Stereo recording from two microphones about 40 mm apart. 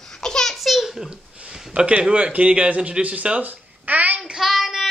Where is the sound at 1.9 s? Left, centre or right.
Right.